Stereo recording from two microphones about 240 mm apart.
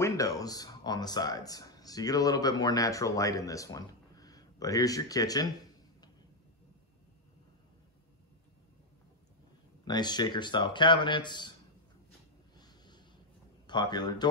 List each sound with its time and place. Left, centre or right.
0.0 s speech: centre
9.8 s speech: centre
12.5 s snort: centre
13.7 s a man's voice: centre